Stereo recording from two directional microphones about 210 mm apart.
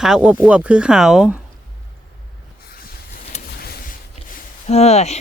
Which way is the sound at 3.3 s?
45° left (ahead or behind).